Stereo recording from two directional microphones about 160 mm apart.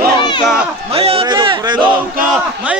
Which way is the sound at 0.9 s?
35° right (ahead or behind).